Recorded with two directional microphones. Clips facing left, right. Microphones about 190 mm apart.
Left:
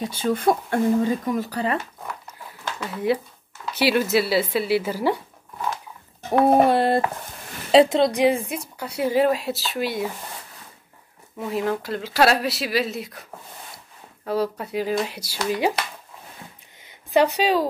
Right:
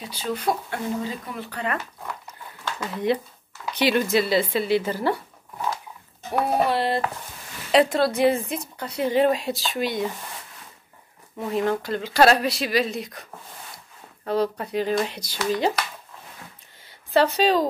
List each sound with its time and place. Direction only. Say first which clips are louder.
0.0 s speech: left 5 dB; 50° left (ahead or behind)
2.2 s a sound: even; 5° left (ahead or behind)
3.7 s a woman's voice: left 1 dB; 5° left (ahead or behind)
6.5 s speech: left 4 dB; 50° left (ahead or behind)
7.7 s a woman's voice: left 3 dB; 20° left (ahead or behind); by 10.0 s 5° left (ahead or behind)
11.3 s a woman's voice: right 1 dB; 5° left (ahead or behind)
16.8 s a sound: left 1 dB; 15° left (ahead or behind)